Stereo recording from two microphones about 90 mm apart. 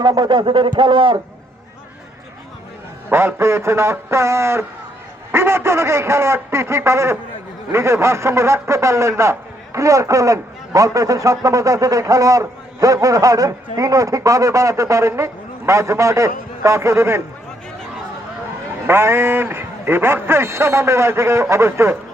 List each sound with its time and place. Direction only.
0.0 s speech: 50° right (ahead or behind)
3.1 s a man's voice: 25° right (ahead or behind)
18.9 s a man's voice: 25° right (ahead or behind)